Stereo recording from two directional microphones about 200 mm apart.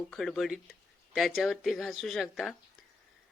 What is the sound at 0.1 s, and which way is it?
Speech, centre (ahead or behind).